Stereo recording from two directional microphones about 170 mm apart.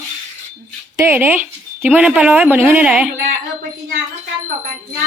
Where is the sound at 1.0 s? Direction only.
15° right (ahead or behind).